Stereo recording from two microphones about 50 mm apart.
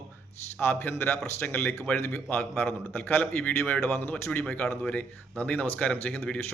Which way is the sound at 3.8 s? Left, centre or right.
Left.